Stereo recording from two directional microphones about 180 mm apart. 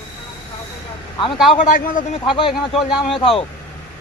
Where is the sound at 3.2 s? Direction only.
30° left (ahead or behind).